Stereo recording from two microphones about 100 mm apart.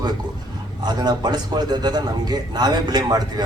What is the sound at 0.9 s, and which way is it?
A man's voice, 45° right (ahead or behind).